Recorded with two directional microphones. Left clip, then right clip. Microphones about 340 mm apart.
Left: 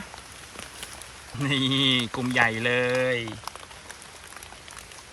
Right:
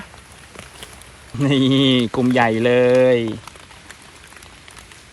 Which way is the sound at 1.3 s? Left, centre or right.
Centre.